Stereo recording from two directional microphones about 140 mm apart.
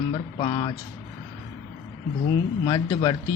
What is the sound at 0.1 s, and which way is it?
Speech, 35° left (ahead or behind).